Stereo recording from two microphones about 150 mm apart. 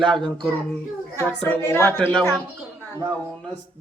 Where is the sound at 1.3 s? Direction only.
5° left (ahead or behind).